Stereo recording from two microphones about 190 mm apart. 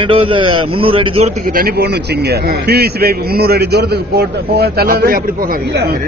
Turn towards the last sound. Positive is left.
turn(degrees=-50)  # may be behind; listen again after turning